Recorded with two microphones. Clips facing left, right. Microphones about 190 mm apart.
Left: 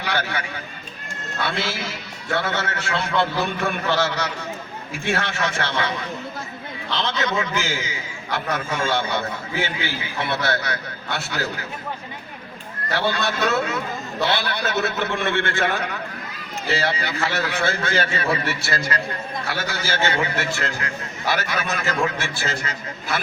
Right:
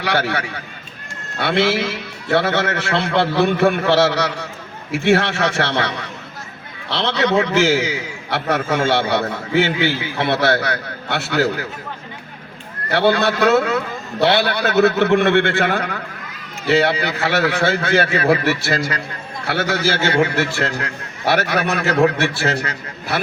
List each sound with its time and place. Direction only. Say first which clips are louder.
0.0 s a man's voice: right 6 dB; 75° right (ahead or behind)
6.9 s a man's voice: right 7 dB; 75° right (ahead or behind)
12.9 s a man's voice: right 7 dB; 65° right (ahead or behind)